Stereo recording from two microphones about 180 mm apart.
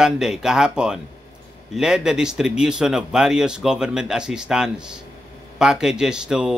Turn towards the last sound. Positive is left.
turn(degrees=-5)  # may be behind; listen again after turning